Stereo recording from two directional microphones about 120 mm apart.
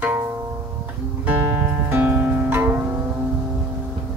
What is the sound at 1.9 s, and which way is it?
Music, 15° right (ahead or behind).